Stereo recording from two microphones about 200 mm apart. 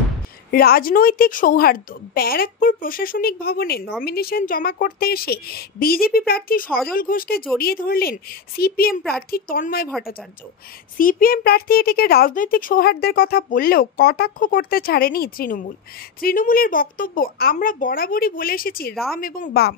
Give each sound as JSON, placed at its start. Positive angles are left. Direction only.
{"t": 0.5, "sound": "speech", "side_deg": 50}
{"t": 11.0, "sound": "speech", "side_deg": 45}